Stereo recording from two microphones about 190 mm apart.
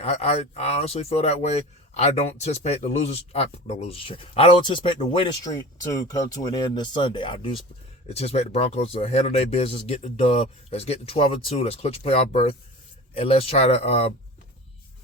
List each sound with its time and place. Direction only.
0.0 s speech: 30° left (ahead or behind)